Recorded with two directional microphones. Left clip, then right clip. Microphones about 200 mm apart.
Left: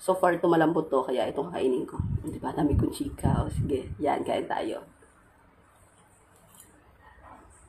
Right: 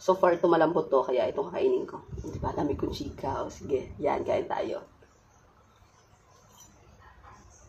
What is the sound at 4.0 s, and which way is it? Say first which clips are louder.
Speech: left 1 dB; centre (ahead or behind).